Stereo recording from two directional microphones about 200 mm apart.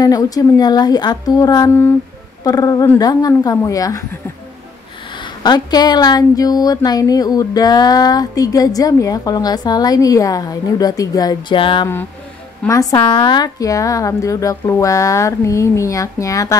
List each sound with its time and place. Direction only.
0.0 s a woman's voice: 20° left (ahead or behind)
5.1 s a woman's voice: 20° left (ahead or behind)